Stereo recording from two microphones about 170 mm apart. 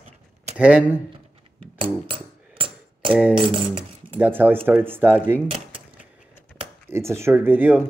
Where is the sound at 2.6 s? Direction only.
30° right (ahead or behind).